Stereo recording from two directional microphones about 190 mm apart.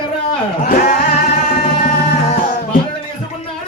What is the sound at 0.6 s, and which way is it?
Music, 50° left (ahead or behind).